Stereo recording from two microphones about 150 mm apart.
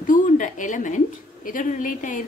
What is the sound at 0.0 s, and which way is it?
A woman's voice, 60° left (ahead or behind).